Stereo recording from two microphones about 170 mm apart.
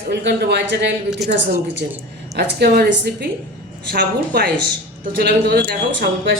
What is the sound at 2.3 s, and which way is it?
Speech, 70° right (ahead or behind).